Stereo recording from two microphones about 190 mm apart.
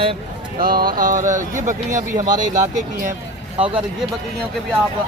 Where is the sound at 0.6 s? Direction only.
50° right (ahead or behind).